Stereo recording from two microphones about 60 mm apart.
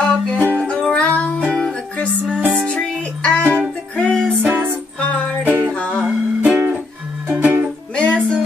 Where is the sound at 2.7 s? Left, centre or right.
Centre.